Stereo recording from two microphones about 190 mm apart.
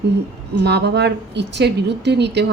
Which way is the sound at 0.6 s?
60° right (ahead or behind).